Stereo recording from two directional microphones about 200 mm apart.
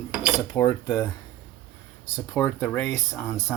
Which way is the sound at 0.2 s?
15° left (ahead or behind).